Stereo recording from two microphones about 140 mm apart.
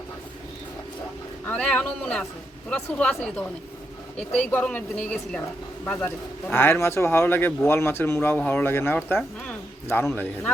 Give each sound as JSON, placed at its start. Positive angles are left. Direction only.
{"t": 1.5, "sound": "a man's voice", "side_deg": 10}